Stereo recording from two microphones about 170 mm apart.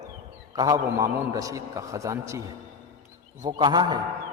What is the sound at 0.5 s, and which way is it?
A man's voice, 20° right (ahead or behind).